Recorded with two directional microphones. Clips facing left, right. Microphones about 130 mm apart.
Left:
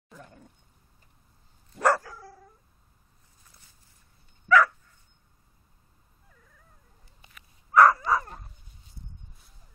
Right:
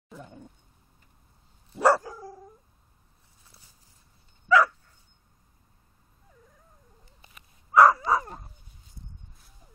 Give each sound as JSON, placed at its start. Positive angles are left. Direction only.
{"t": 0.1, "sound": "a sound", "side_deg": -5}
{"t": 1.7, "sound": "dog", "side_deg": -15}
{"t": 4.5, "sound": "dog", "side_deg": -15}
{"t": 7.7, "sound": "dog", "side_deg": -15}